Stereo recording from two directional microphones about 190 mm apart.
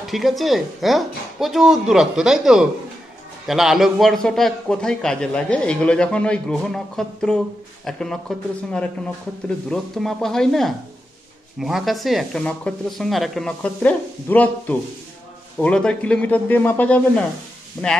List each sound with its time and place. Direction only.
0.0 s a man's voice: centre (ahead or behind)